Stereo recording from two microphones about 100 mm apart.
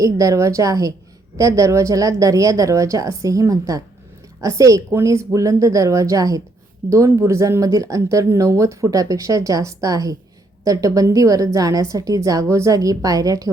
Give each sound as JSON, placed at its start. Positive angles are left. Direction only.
{"t": 0.0, "sound": "speech", "side_deg": -35}